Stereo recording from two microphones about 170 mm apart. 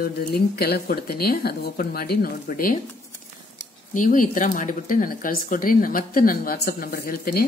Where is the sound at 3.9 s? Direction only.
50° left (ahead or behind).